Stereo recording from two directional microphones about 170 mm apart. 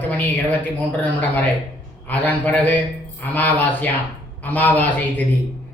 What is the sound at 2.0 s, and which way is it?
A woman's voice, 10° left (ahead or behind).